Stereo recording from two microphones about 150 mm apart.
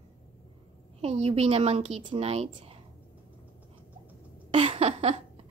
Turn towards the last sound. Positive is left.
turn(degrees=-40)  # may be behind; listen again after turning